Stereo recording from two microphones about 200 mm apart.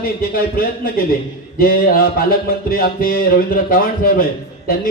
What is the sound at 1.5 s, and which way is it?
A man's voice, 45° left (ahead or behind).